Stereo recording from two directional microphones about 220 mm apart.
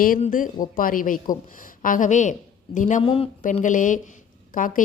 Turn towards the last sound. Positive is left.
turn(degrees=35)  # may be behind; listen again after turning